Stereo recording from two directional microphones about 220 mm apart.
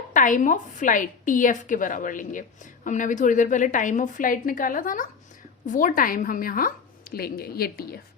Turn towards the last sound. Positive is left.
turn(degrees=45)  # may be behind; listen again after turning